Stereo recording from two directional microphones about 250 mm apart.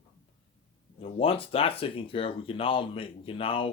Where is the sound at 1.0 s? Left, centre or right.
Left.